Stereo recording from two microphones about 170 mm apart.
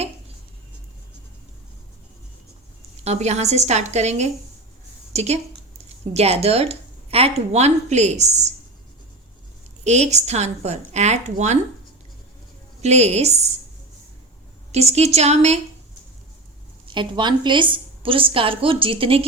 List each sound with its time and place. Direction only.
3.0 s a woman's voice: 40° right (ahead or behind)
9.8 s a woman's voice: 40° right (ahead or behind)
12.8 s a woman's voice: 40° right (ahead or behind)
14.7 s a woman's voice: 40° right (ahead or behind)
16.8 s a woman's voice: 30° right (ahead or behind)